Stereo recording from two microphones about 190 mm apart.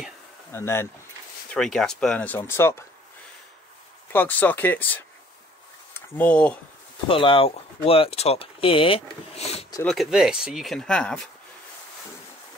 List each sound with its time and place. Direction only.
0.5 s speech: 15° left (ahead or behind)
1.5 s speech: 5° left (ahead or behind)
4.1 s speech: 10° left (ahead or behind)
7.1 s speech: 30° left (ahead or behind)
9.8 s speech: centre (ahead or behind)